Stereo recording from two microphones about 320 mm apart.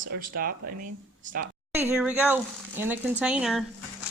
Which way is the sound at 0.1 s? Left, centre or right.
Right.